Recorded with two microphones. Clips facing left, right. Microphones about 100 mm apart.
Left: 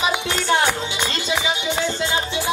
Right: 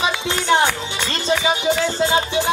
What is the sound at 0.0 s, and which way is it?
Music, 25° right (ahead or behind).